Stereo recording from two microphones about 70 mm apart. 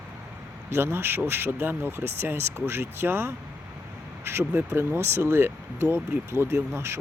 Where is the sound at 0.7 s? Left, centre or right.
Right.